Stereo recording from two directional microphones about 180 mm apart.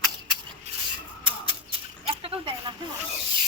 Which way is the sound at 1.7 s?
30° right (ahead or behind).